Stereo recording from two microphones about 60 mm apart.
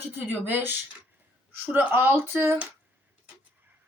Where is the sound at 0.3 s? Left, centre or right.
Right.